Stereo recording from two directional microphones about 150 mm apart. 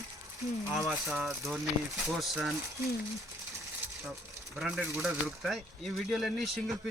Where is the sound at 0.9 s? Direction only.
5° right (ahead or behind).